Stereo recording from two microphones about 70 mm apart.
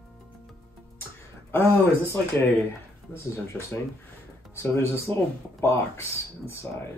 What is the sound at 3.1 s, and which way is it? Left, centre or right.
Speech, left.